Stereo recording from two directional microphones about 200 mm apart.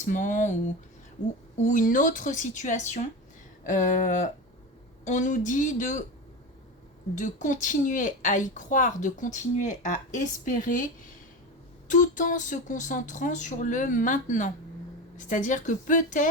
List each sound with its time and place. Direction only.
0.0 s a woman's voice: 40° left (ahead or behind)
1.5 s a woman's voice: 40° left (ahead or behind)
7.2 s a woman's voice: 40° left (ahead or behind)
11.9 s a woman's voice: 40° left (ahead or behind)